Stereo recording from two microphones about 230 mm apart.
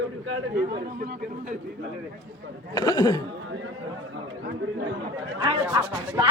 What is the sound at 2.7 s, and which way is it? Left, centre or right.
Speech, centre.